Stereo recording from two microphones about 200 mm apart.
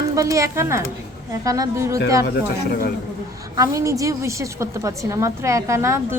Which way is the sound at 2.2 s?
50° left (ahead or behind).